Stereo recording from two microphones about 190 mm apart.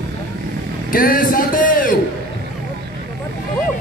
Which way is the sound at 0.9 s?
50° left (ahead or behind).